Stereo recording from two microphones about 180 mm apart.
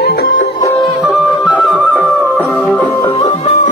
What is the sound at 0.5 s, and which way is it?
Music, 20° left (ahead or behind).